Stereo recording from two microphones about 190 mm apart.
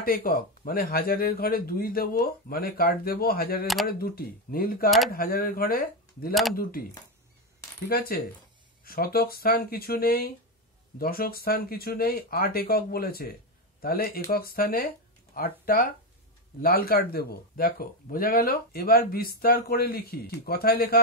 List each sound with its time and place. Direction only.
0.0 s a man's voice: 50° left (ahead or behind)
7.9 s a man's voice: 50° left (ahead or behind)